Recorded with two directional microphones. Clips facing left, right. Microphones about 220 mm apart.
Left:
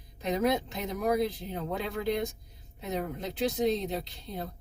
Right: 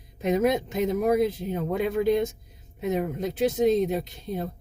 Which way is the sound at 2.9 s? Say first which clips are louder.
Right 7 dB; 20° right (ahead or behind).